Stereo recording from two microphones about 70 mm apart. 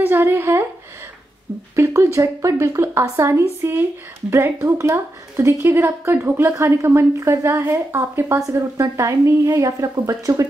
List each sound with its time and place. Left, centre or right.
0.0 s a woman's voice: right
2.1 s a woman's voice: right
5.8 s a woman's voice: right
8.4 s a woman's voice: right